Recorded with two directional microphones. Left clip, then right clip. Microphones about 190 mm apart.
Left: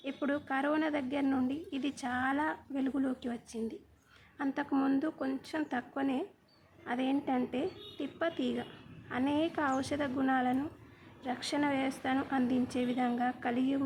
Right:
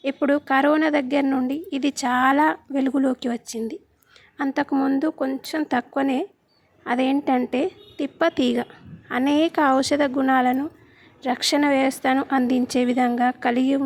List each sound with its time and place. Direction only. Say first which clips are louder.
0.0 s a woman's voice: right 14 dB; 45° right (ahead or behind)